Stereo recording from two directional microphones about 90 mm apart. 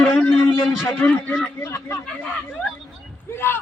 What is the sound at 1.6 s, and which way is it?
Speech, 30° left (ahead or behind).